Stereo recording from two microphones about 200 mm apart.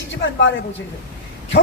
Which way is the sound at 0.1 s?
65° left (ahead or behind).